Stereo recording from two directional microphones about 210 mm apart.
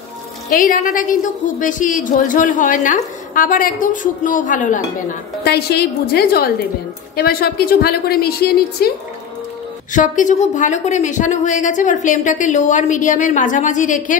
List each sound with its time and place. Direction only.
0.5 s a woman's voice: 40° left (ahead or behind)
5.4 s a woman's voice: 50° left (ahead or behind)
9.9 s a woman's voice: 35° left (ahead or behind)